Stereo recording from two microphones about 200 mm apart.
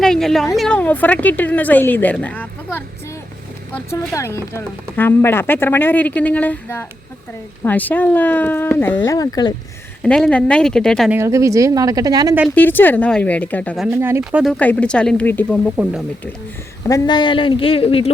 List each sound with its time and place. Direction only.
0.0 s speech: centre (ahead or behind); by 9.6 s 20° left (ahead or behind)
10.0 s speech: 5° left (ahead or behind)
11.2 s speech: 15° right (ahead or behind)
12.5 s speech: 10° left (ahead or behind)
13.8 s speech: 10° right (ahead or behind); by 15.7 s 5° left (ahead or behind)
15.7 s speech: 5° right (ahead or behind)
16.8 s speech: 20° left (ahead or behind)